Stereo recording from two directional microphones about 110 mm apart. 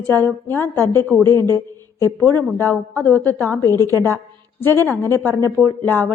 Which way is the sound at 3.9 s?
30° right (ahead or behind).